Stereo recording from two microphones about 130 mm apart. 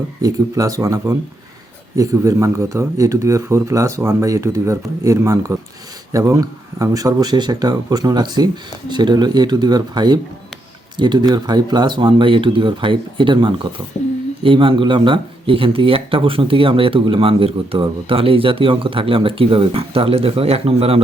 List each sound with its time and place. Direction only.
0.2 s speech: 25° right (ahead or behind); by 21.0 s 50° right (ahead or behind)